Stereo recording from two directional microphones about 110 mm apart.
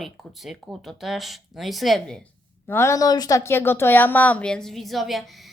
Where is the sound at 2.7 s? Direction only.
25° left (ahead or behind).